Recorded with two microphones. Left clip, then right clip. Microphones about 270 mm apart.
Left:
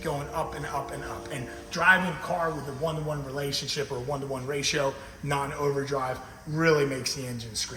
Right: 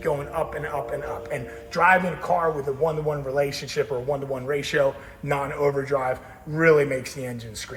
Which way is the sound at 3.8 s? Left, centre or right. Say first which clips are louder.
Right 6 dB; centre.